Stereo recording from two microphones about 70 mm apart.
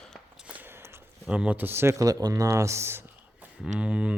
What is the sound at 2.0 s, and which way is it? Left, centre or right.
Speech, right.